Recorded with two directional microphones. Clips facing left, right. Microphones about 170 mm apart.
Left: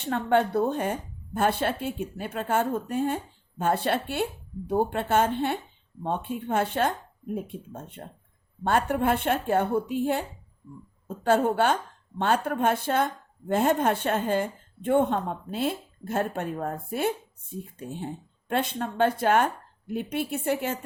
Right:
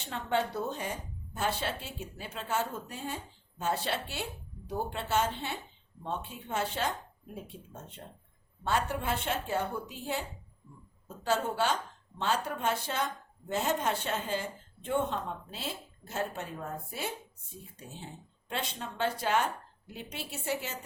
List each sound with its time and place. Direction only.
0.0 s a woman's voice: 55° left (ahead or behind)